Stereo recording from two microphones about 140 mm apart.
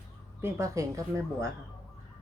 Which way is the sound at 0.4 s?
20° right (ahead or behind).